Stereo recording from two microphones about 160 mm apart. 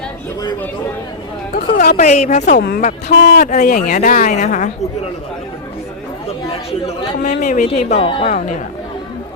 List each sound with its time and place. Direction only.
1.5 s a woman's voice: 60° left (ahead or behind); by 2.6 s 45° left (ahead or behind)
2.6 s speech: 75° left (ahead or behind)
3.3 s a woman's voice: 55° left (ahead or behind)
6.2 s chatter: 40° left (ahead or behind)
7.3 s a woman's voice: 55° left (ahead or behind); by 8.3 s 35° left (ahead or behind)
8.3 s a woman's voice: 50° left (ahead or behind)